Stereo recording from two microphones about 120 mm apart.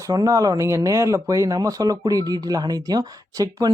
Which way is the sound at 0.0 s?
30° right (ahead or behind).